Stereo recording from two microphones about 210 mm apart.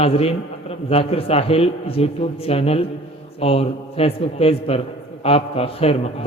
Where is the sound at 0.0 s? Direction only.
30° left (ahead or behind).